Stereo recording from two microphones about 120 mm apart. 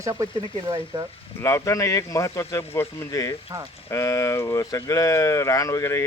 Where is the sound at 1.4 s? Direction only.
25° left (ahead or behind).